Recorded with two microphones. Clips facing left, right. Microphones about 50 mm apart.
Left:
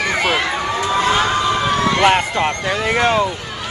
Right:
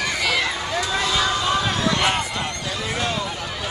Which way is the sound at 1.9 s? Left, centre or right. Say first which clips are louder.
Left 7 dB; left.